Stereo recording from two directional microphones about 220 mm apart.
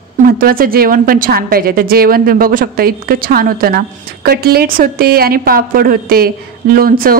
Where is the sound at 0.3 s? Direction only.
40° right (ahead or behind).